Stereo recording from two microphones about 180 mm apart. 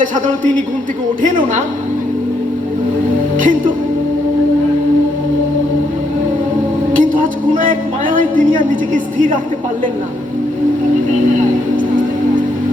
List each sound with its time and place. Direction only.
1.2 s a woman's voice: 45° right (ahead or behind)
3.3 s music: 50° right (ahead or behind)
7.2 s a woman's voice: 50° right (ahead or behind)